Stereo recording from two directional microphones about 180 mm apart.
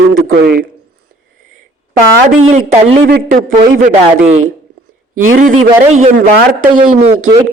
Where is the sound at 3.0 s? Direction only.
60° right (ahead or behind).